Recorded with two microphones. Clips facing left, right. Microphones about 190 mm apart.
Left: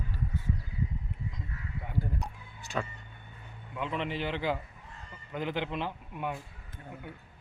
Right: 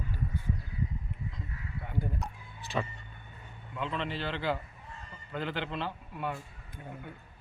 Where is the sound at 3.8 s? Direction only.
15° left (ahead or behind).